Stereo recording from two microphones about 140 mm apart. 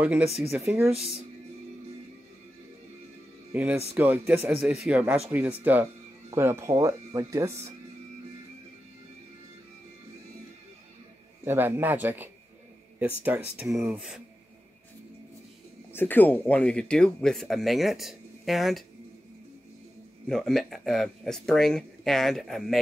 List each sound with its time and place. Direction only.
0.0 s speech: 10° right (ahead or behind)
3.5 s speech: 10° right (ahead or behind)
11.4 s speech: 15° right (ahead or behind)
15.9 s speech: 15° left (ahead or behind)
20.2 s speech: 5° left (ahead or behind)